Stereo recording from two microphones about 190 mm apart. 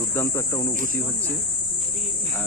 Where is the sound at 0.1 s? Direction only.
15° left (ahead or behind).